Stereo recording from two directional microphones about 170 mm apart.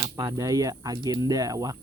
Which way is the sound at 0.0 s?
20° right (ahead or behind).